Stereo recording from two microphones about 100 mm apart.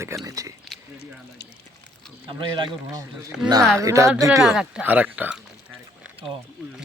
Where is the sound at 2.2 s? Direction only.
50° right (ahead or behind).